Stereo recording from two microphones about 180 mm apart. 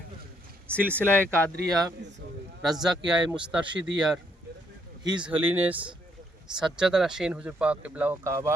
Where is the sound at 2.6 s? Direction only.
Centre (ahead or behind).